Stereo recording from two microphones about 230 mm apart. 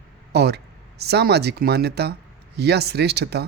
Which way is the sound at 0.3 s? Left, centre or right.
Right.